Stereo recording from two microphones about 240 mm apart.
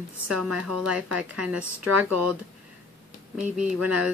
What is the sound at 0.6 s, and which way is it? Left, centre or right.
A woman's voice, right.